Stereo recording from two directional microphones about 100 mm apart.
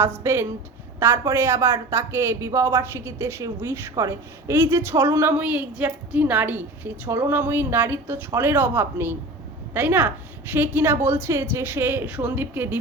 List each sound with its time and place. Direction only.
0.2 s a woman's voice: 25° right (ahead or behind)
5.4 s a woman's voice: 15° right (ahead or behind)